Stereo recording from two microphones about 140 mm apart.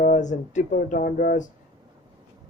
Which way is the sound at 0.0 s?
60° left (ahead or behind).